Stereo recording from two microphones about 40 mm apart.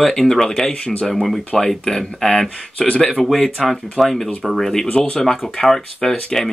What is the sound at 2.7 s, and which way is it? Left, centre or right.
Speech, left.